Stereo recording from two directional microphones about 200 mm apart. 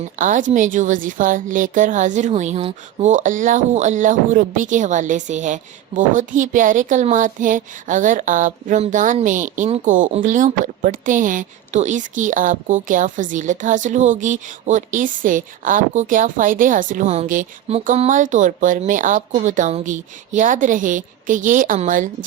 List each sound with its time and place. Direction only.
0.2 s a woman's voice: 40° right (ahead or behind)